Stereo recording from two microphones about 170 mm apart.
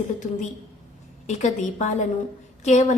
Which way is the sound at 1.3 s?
45° left (ahead or behind).